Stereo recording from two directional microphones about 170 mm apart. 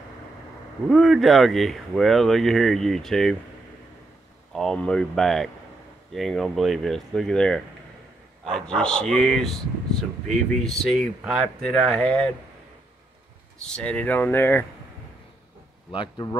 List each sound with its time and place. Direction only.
0.8 s speech: centre (ahead or behind)
4.5 s speech: 5° left (ahead or behind)
13.6 s speech: 5° left (ahead or behind)
15.9 s speech: 25° left (ahead or behind)